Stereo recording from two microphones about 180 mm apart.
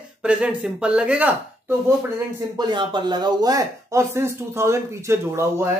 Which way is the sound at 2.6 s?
25° right (ahead or behind).